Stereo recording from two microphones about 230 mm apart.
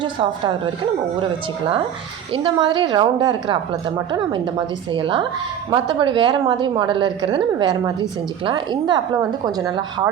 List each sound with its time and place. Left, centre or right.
0.0 s a woman's voice: right
2.3 s a woman's voice: right